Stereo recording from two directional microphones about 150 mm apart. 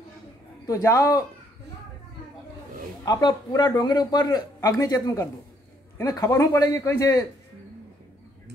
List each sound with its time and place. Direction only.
0.7 s a man's voice: 20° left (ahead or behind)
3.1 s a man's voice: 25° left (ahead or behind)